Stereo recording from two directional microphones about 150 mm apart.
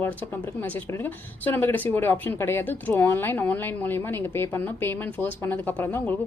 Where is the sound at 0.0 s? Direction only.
10° left (ahead or behind).